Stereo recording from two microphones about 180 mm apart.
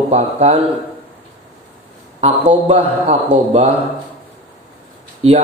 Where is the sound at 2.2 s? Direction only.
35° right (ahead or behind).